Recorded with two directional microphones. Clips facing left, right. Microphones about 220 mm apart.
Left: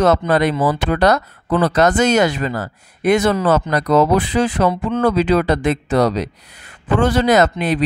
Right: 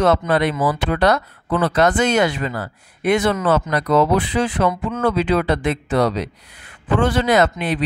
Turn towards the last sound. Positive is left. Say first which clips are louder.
# left 2 dB
turn(degrees=40)  # may be behind; listen again after turning